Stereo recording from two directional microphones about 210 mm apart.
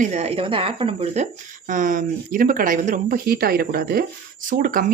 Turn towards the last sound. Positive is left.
turn(degrees=-40)  # may be behind; listen again after turning